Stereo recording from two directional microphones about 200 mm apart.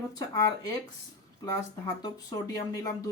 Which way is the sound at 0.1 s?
20° left (ahead or behind).